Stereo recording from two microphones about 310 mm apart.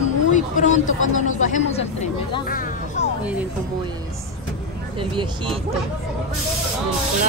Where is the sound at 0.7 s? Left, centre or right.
Left.